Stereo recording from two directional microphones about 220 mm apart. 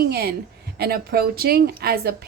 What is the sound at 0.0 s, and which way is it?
A woman's voice, 45° right (ahead or behind).